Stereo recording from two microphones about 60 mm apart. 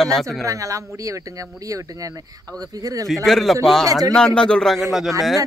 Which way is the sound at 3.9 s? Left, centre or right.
Right.